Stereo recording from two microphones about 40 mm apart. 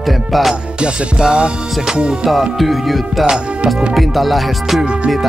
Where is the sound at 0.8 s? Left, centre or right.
Right.